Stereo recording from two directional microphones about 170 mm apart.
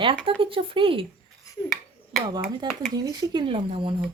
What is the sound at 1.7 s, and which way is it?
Finger snapping, centre (ahead or behind).